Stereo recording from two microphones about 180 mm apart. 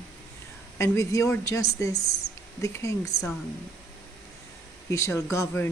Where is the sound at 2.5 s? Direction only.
15° left (ahead or behind).